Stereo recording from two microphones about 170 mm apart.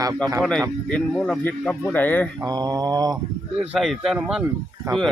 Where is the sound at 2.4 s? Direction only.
25° right (ahead or behind).